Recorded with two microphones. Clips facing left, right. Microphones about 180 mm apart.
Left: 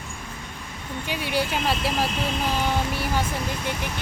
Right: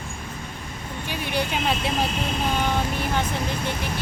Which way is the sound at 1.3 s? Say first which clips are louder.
Even; 5° left (ahead or behind).